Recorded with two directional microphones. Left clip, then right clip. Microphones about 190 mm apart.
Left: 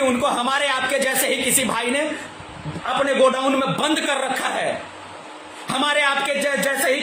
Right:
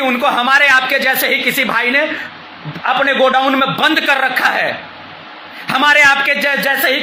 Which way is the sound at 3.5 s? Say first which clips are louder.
Right 8 dB; 15° left (ahead or behind).